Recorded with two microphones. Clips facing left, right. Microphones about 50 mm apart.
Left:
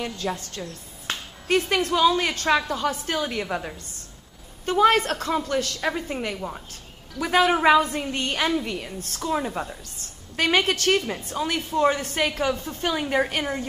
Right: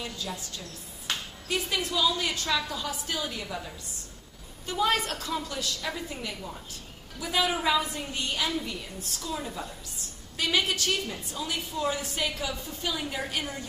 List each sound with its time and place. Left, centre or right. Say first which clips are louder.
0.0 s a woman's voice: left 7 dB; left
1.7 s a woman's voice: left 7 dB; left